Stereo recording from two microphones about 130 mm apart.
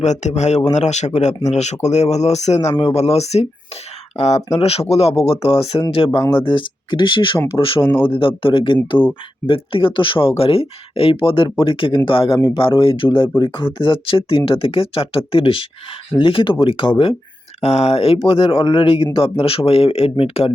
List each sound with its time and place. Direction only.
0.0 s speech: 65° left (ahead or behind)
6.1 s speech: 30° left (ahead or behind)
6.4 s speech: 40° left (ahead or behind)
17.6 s speech: 55° left (ahead or behind)